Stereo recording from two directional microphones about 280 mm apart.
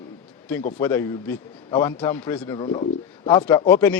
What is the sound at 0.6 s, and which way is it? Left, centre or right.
Speech, left.